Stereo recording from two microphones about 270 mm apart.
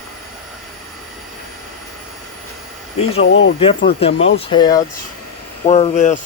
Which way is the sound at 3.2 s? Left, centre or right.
Left.